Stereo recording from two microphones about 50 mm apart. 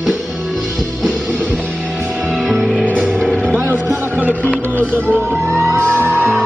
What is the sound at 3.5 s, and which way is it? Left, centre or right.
Music, right.